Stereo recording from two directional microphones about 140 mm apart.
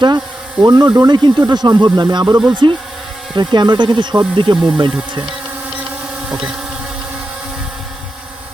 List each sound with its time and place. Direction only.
0.6 s speech: 30° right (ahead or behind)